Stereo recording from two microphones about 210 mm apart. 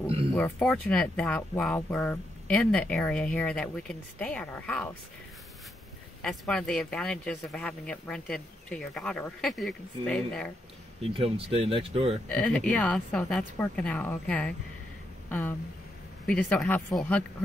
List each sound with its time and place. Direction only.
0.3 s speech: 5° left (ahead or behind)
6.2 s speech: 5° left (ahead or behind)
11.1 s speech: 25° right (ahead or behind)
12.3 s speech: 5° left (ahead or behind)
16.3 s speech: 5° left (ahead or behind)